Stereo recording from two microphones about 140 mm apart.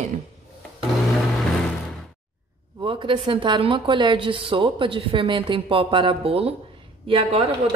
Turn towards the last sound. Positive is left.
turn(degrees=-45)  # may be behind; listen again after turning